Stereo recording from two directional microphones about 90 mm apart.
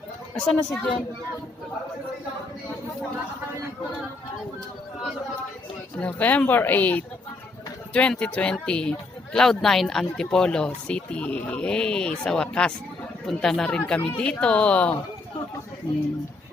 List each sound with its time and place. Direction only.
0.3 s speech: 5° left (ahead or behind)
6.0 s speech: 15° left (ahead or behind)